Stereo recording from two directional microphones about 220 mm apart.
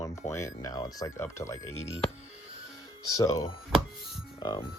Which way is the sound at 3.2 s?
15° left (ahead or behind).